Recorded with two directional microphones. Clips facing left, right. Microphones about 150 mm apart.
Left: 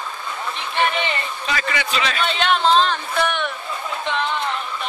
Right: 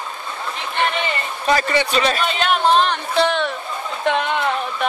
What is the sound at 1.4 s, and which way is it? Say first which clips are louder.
Speech: right 9 dB; 35° right (ahead or behind).